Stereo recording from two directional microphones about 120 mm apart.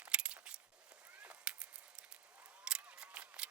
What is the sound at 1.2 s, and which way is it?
Honk, 10° right (ahead or behind).